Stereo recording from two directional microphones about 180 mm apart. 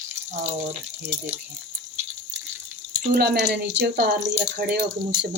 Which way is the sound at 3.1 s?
60° right (ahead or behind).